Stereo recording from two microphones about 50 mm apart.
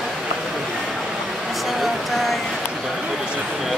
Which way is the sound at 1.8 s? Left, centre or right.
Centre.